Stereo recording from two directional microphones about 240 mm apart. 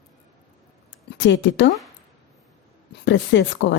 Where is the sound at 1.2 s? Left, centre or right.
Left.